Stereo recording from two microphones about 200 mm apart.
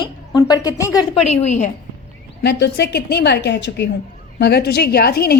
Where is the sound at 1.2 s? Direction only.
35° left (ahead or behind).